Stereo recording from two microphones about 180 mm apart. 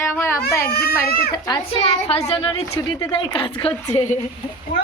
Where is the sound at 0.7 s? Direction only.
60° left (ahead or behind).